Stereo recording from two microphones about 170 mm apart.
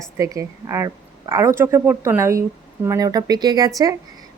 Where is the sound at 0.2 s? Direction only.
20° right (ahead or behind).